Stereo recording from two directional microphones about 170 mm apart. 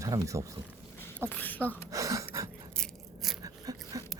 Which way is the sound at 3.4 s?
20° right (ahead or behind).